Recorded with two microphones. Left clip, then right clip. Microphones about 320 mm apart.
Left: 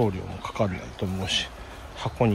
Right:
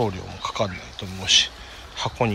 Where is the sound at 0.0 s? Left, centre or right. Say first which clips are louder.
Right 2 dB; centre.